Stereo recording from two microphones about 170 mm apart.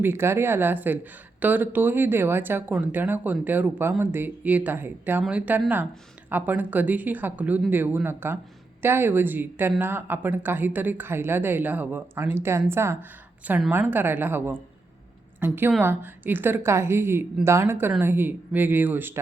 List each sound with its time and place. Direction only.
0.0 s speech: 15° right (ahead or behind)